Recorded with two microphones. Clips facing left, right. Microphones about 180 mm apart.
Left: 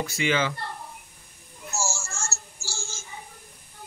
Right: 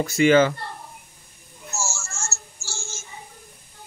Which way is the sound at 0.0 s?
45° right (ahead or behind).